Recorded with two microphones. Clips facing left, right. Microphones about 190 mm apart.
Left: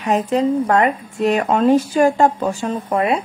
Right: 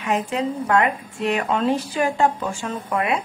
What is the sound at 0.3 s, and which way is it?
A woman's voice, 40° left (ahead or behind).